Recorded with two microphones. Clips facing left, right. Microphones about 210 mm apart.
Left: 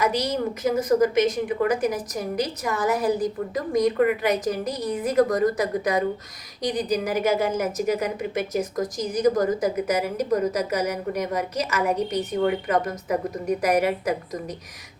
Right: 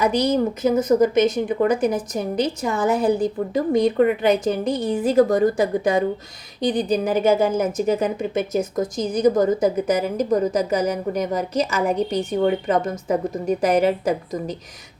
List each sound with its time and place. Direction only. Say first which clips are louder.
0.0 s a woman's voice: right 5 dB; 30° right (ahead or behind)